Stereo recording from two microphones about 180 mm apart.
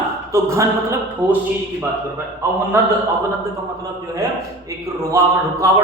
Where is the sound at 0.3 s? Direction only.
15° right (ahead or behind).